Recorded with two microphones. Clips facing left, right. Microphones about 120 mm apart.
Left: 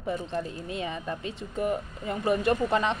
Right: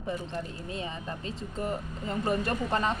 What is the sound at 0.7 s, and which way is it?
Speech, 30° right (ahead or behind).